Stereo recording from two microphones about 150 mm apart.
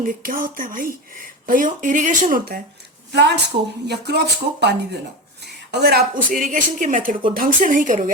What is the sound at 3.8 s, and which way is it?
Speech, 90° right.